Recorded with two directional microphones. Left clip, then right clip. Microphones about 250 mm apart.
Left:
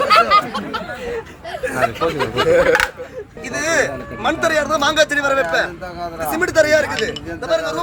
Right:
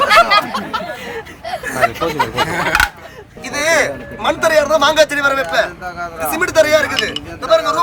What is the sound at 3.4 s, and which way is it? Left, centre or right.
Speech, centre.